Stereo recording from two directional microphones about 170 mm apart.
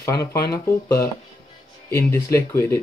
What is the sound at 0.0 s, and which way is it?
Speech, 20° left (ahead or behind).